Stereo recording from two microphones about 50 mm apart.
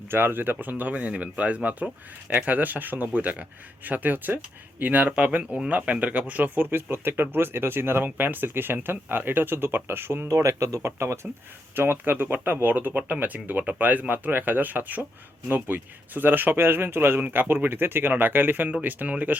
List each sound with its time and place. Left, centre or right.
0.1 s speech: right
10.2 s speech: right
11.7 s speech: right
17.2 s speech: right
17.5 s speech: right